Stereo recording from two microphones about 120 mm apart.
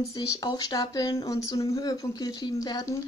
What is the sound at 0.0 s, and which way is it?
Speech, 30° left (ahead or behind).